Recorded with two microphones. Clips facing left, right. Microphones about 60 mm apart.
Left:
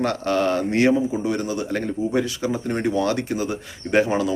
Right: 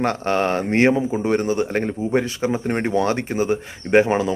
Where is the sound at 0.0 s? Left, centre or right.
Right.